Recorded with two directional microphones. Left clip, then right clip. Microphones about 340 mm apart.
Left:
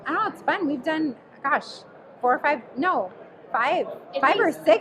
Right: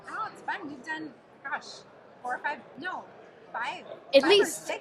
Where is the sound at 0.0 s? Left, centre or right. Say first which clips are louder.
Left 11 dB; left.